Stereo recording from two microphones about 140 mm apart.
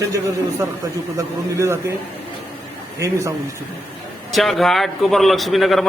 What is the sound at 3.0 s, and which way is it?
Speech, 20° right (ahead or behind).